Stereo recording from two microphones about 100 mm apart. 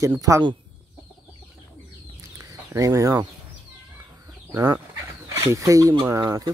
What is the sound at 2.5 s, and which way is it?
Speech, 30° right (ahead or behind).